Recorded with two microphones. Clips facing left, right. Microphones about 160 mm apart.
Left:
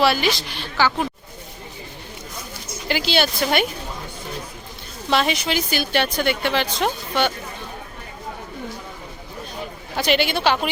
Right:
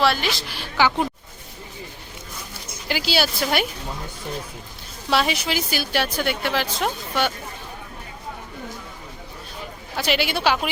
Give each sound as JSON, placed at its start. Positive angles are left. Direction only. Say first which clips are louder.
{"t": 0.0, "sound": "a woman's voice", "louder": "left 2 dB", "side_deg": 0}
{"t": 0.8, "sound": "speech", "louder": "right 1 dB", "side_deg": -15}
{"t": 2.9, "sound": "a woman's voice", "louder": "left 2 dB", "side_deg": -5}
{"t": 5.1, "sound": "a woman's voice", "louder": "left 1 dB", "side_deg": -5}
{"t": 10.0, "sound": "a woman's voice", "louder": "left 2 dB", "side_deg": -5}